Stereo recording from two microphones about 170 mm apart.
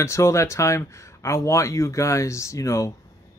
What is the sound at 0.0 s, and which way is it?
Speech, 15° left (ahead or behind).